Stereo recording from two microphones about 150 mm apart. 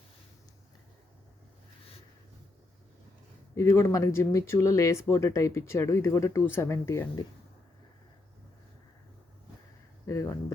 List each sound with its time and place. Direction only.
3.5 s speech: 20° left (ahead or behind)
10.1 s speech: 20° left (ahead or behind)